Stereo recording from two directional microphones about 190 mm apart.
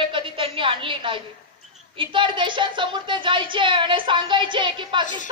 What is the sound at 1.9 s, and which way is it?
A woman's voice, 25° right (ahead or behind).